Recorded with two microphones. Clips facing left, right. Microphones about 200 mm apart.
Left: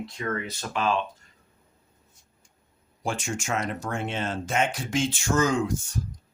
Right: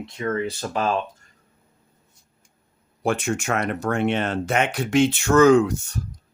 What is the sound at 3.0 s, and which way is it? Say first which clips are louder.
Speech: right 7 dB; 60° right (ahead or behind).